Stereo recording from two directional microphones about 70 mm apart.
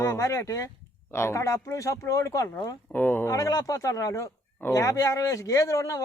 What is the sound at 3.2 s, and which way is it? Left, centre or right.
Speech, left.